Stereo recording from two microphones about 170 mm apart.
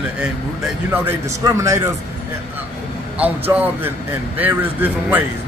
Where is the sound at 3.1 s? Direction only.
10° right (ahead or behind).